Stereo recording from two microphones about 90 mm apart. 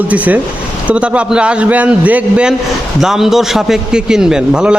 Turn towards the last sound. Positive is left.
turn(degrees=-10)  # may be behind; listen again after turning